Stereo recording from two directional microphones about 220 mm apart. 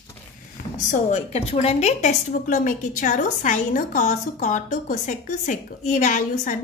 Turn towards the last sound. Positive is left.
turn(degrees=35)  # may be behind; listen again after turning